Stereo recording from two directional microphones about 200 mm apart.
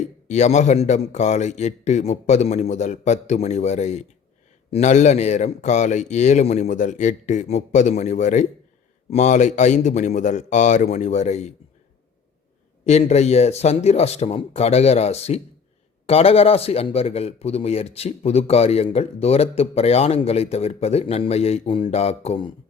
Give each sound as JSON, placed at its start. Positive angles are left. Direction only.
{"t": 0.3, "sound": "speech", "side_deg": 35}
{"t": 12.8, "sound": "speech", "side_deg": 35}